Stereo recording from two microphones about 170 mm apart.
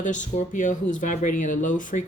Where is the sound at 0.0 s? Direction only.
45° left (ahead or behind).